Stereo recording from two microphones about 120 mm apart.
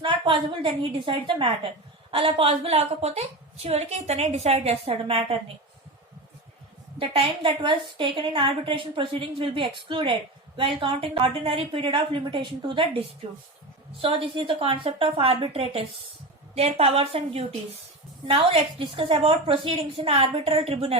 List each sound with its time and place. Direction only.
0.0 s a woman's voice: 45° right (ahead or behind)
7.0 s a woman's voice: 50° right (ahead or behind)